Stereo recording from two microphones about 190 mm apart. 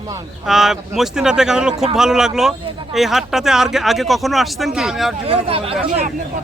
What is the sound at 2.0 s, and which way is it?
Speech, 5° right (ahead or behind).